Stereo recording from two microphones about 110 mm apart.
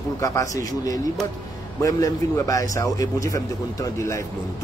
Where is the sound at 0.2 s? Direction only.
30° left (ahead or behind).